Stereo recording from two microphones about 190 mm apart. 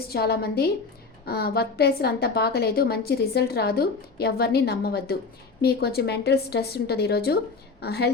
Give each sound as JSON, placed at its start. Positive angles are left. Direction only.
{"t": 0.1, "sound": "a woman's voice", "side_deg": 55}